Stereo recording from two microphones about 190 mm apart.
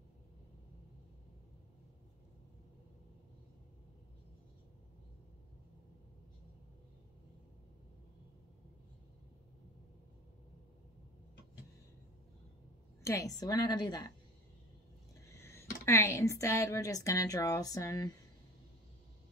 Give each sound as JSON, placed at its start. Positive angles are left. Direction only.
{"t": 13.0, "sound": "a woman's voice", "side_deg": 15}
{"t": 15.2, "sound": "speech", "side_deg": 15}